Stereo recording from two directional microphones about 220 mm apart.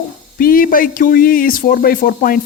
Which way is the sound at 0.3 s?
40° left (ahead or behind).